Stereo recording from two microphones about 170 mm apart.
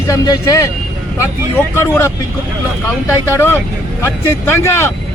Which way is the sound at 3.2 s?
15° left (ahead or behind).